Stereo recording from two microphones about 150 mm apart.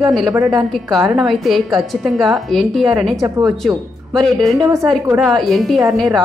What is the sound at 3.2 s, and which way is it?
Speech, 20° right (ahead or behind).